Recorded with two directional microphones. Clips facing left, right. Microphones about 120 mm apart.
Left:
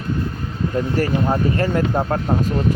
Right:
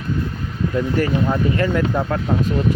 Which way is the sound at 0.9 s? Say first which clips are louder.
Left 1 dB; 40° left (ahead or behind).